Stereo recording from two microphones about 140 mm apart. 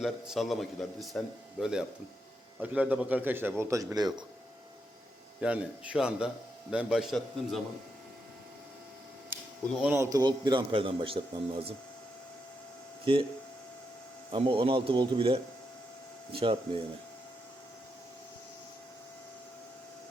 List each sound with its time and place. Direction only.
0.0 s a man's voice: centre (ahead or behind); by 4.1 s 25° right (ahead or behind)
5.4 s a man's voice: 10° right (ahead or behind)
9.8 s a man's voice: 20° right (ahead or behind); by 11.6 s 40° right (ahead or behind)
13.1 s a man's voice: 40° right (ahead or behind)
14.3 s a man's voice: 40° right (ahead or behind)